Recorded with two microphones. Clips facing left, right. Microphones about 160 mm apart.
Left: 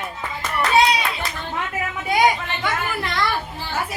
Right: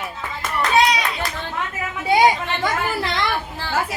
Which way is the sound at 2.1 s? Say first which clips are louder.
Right 3 dB; 30° right (ahead or behind).